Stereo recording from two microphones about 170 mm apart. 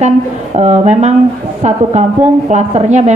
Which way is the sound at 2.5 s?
40° right (ahead or behind).